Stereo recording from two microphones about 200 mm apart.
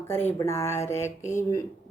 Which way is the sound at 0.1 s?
10° left (ahead or behind).